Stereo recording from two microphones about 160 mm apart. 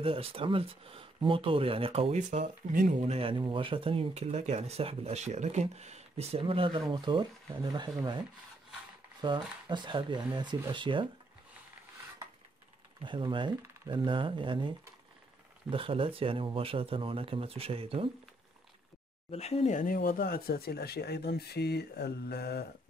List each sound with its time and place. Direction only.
0.0 s speech: 35° right (ahead or behind); by 3.0 s 55° right (ahead or behind)
3.1 s speech: 35° right (ahead or behind)
9.2 s speech: 30° right (ahead or behind)
13.0 s speech: 30° right (ahead or behind)
15.7 s speech: 35° right (ahead or behind)
19.3 s speech: 40° left (ahead or behind); by 22.7 s 90° left